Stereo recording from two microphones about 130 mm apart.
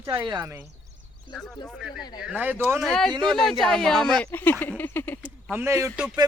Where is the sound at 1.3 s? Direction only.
5° left (ahead or behind).